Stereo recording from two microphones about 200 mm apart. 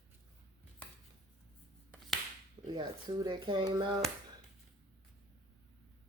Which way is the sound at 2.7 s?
20° right (ahead or behind).